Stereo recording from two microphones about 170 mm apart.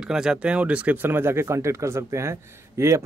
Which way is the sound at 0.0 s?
5° right (ahead or behind).